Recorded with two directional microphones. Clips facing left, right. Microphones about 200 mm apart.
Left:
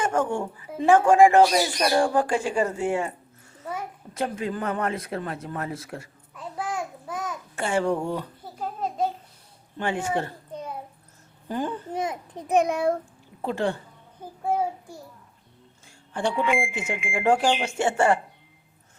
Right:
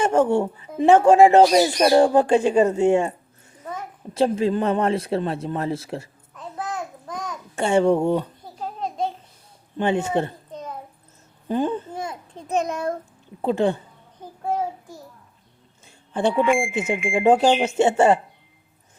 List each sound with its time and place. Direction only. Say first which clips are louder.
0.0 s a woman's voice: right 6 dB; 25° right (ahead or behind)
4.1 s speech: right 9 dB; 25° right (ahead or behind)
6.3 s babbling: even; 10° left (ahead or behind)
7.5 s speech: right 7 dB; 25° right (ahead or behind)
8.5 s a sound: even; 5° left (ahead or behind)
9.7 s speech: right 6 dB; 20° right (ahead or behind)
10.5 s a sound: right 1 dB; 10° left (ahead or behind)
11.4 s speech: right 6 dB; 20° right (ahead or behind)
11.9 s a child's voice: left 3 dB; 20° left (ahead or behind)
13.4 s speech: right 6 dB; 20° right (ahead or behind)
14.2 s child singing: even; 10° left (ahead or behind)
16.4 s speech: right 5 dB; 45° right (ahead or behind)
17.2 s speech: right 5 dB; 20° right (ahead or behind)